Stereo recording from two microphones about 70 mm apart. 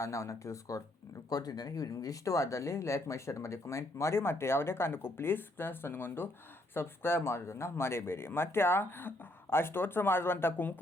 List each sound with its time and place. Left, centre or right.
0.0 s speech: left
1.3 s speech: left